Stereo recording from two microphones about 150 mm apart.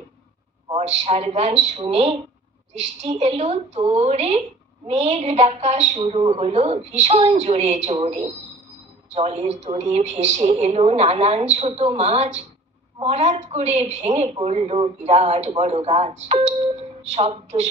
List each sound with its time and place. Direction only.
0.7 s a woman's voice: 45° right (ahead or behind)